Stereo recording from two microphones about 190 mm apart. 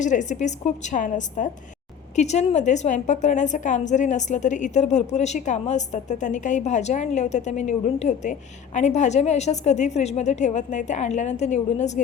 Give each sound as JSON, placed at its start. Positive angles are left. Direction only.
{"t": 0.0, "sound": "a woman's voice", "side_deg": 40}